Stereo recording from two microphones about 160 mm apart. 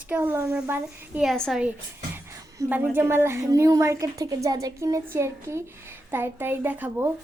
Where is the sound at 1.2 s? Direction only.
Centre (ahead or behind).